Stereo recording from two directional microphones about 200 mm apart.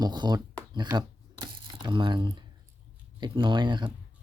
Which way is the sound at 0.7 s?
20° right (ahead or behind).